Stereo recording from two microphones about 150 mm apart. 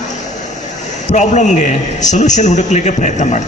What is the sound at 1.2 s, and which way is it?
A man's voice, 50° left (ahead or behind).